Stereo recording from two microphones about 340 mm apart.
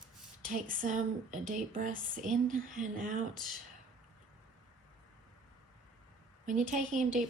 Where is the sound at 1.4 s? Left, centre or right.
Right.